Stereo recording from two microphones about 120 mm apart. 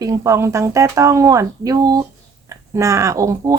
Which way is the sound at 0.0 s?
30° right (ahead or behind).